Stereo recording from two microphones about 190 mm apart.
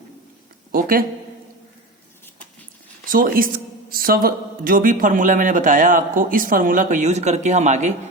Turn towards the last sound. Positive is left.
turn(degrees=-40)  # may be behind; listen again after turning